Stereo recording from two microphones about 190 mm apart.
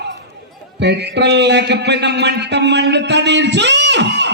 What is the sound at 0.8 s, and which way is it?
Speech, 60° right (ahead or behind).